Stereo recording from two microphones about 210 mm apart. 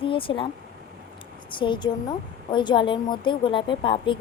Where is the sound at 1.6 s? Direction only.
20° left (ahead or behind).